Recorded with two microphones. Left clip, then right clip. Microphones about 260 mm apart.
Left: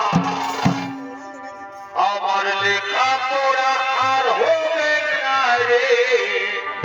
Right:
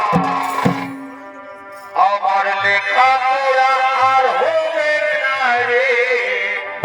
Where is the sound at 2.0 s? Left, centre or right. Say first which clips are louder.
Right 3 dB; centre.